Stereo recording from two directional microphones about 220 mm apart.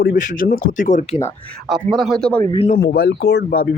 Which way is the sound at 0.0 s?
40° left (ahead or behind).